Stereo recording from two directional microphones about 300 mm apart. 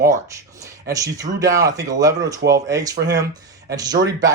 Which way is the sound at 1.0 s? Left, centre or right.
Centre.